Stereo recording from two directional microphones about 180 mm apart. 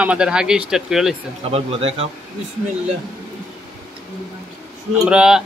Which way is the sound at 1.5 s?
30° right (ahead or behind).